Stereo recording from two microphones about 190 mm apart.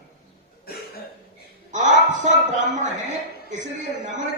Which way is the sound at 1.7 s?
40° right (ahead or behind).